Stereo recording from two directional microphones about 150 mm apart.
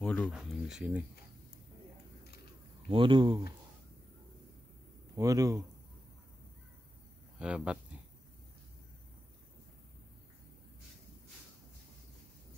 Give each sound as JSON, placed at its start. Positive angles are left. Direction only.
{"t": 0.0, "sound": "speech", "side_deg": 10}
{"t": 2.9, "sound": "speech", "side_deg": -35}
{"t": 5.1, "sound": "a man's voice", "side_deg": -25}
{"t": 7.3, "sound": "speech", "side_deg": -5}